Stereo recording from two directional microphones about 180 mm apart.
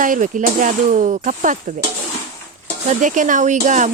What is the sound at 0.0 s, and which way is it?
A woman's voice, 45° right (ahead or behind).